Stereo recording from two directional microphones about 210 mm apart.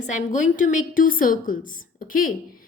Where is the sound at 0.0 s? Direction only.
35° left (ahead or behind).